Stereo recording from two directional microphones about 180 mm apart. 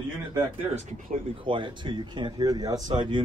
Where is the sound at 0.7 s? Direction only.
45° right (ahead or behind).